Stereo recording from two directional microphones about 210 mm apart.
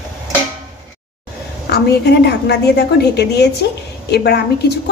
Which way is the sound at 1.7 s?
50° left (ahead or behind).